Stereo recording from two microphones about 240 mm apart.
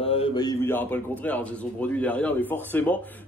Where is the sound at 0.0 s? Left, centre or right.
Left.